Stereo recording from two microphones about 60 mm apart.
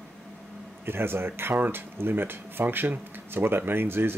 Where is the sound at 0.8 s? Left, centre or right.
Right.